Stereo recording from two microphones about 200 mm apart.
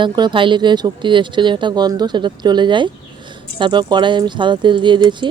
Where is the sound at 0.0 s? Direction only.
25° right (ahead or behind).